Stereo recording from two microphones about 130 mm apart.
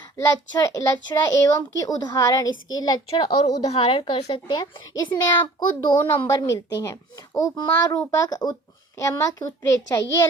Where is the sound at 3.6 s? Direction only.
50° left (ahead or behind).